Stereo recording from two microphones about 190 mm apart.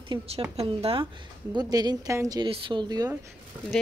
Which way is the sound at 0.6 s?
30° right (ahead or behind).